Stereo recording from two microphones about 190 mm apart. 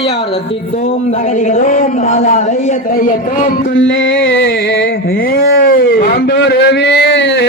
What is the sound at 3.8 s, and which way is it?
Music, 75° left (ahead or behind).